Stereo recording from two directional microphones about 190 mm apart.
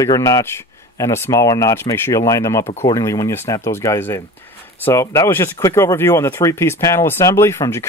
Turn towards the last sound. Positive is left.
turn(degrees=15)  # may be behind; listen again after turning